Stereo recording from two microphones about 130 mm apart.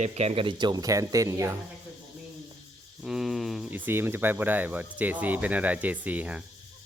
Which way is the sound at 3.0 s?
5° right (ahead or behind).